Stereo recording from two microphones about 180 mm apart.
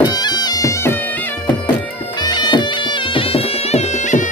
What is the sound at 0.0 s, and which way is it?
Bagpipes, 25° left (ahead or behind).